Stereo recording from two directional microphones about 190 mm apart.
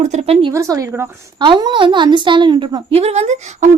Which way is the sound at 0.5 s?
15° right (ahead or behind).